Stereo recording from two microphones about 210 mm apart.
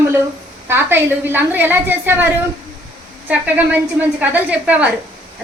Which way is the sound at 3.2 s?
5° right (ahead or behind).